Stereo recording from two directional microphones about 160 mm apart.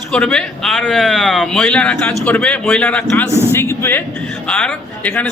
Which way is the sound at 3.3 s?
15° right (ahead or behind).